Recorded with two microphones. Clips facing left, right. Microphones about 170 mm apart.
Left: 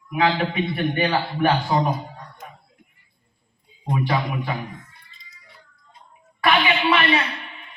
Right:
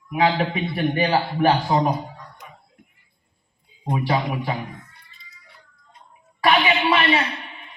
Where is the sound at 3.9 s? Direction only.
25° right (ahead or behind).